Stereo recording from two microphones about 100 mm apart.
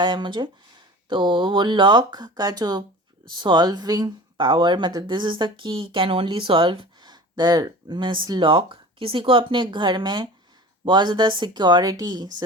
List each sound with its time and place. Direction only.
0.0 s speech: 50° right (ahead or behind)